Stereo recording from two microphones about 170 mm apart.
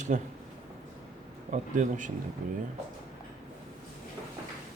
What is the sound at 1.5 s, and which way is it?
Speech, 45° right (ahead or behind).